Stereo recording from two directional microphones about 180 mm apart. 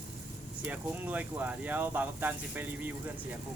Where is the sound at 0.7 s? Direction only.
10° right (ahead or behind).